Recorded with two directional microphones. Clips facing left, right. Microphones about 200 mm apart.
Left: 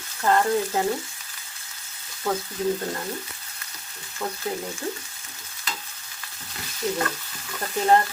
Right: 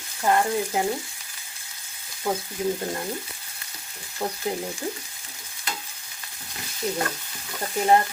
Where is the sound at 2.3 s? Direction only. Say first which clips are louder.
Even; 15° right (ahead or behind).